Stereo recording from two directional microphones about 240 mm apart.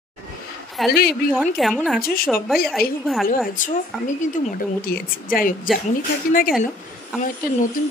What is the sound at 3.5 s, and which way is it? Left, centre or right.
A woman's voice, left.